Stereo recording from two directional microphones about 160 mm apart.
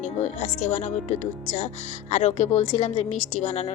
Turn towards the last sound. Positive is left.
turn(degrees=45)  # may be behind; listen again after turning